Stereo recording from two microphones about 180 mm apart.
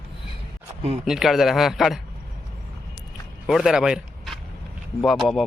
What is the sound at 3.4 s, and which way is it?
Speech, centre (ahead or behind).